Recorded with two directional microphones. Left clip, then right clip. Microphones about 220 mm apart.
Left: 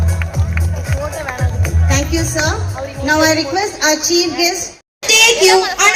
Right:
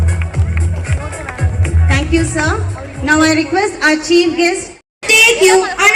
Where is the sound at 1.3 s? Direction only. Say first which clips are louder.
Left 1 dB; 5° left (ahead or behind).